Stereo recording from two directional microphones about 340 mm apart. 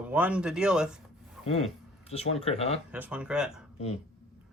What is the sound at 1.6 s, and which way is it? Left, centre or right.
Speech, centre.